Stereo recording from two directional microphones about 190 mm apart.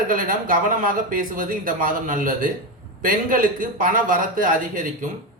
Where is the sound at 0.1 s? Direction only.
45° right (ahead or behind).